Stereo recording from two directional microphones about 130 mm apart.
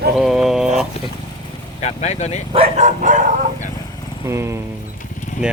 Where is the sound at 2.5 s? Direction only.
55° right (ahead or behind); by 3.3 s 80° right.